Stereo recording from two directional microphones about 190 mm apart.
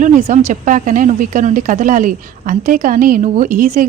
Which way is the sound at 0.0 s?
40° right (ahead or behind).